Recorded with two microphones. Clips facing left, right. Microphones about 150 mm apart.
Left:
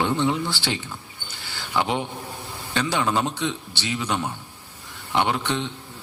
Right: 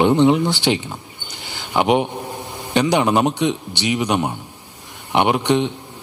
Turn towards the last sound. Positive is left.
turn(degrees=-15)  # may be behind; listen again after turning